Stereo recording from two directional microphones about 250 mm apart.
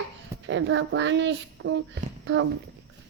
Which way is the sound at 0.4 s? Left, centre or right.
Right.